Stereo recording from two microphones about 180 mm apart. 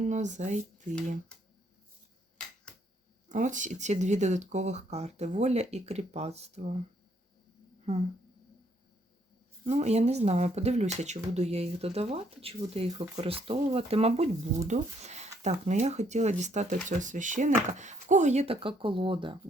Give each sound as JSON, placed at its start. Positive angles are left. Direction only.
{"t": 0.0, "sound": "speech", "side_deg": -40}
{"t": 3.2, "sound": "speech", "side_deg": -45}
{"t": 9.6, "sound": "speech", "side_deg": -35}